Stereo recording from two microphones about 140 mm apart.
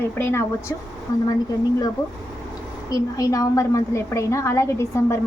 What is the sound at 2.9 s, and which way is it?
A woman's voice, 25° left (ahead or behind).